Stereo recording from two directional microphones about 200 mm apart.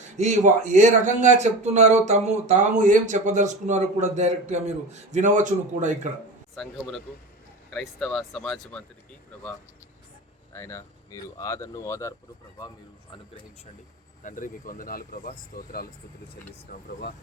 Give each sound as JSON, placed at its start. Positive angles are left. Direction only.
{"t": 0.2, "sound": "speech", "side_deg": -35}
{"t": 6.6, "sound": "speech", "side_deg": 0}
{"t": 10.5, "sound": "speech", "side_deg": 15}
{"t": 14.3, "sound": "speech", "side_deg": 40}